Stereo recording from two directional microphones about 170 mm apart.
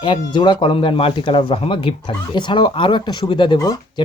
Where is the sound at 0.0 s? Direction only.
25° left (ahead or behind).